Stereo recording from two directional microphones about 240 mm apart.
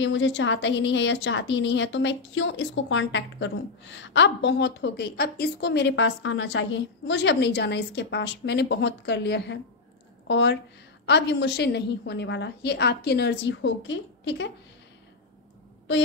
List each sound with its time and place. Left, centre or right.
0.0 s a woman's voice: left